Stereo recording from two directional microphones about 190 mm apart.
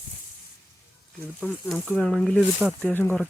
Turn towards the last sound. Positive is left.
turn(degrees=10)  # may be behind; listen again after turning